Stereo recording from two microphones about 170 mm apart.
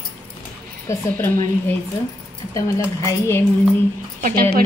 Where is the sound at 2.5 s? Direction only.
15° left (ahead or behind).